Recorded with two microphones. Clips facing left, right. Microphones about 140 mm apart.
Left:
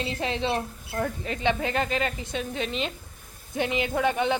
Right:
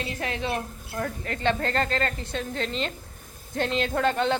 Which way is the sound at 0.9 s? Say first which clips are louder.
Left 2 dB; 15° left (ahead or behind).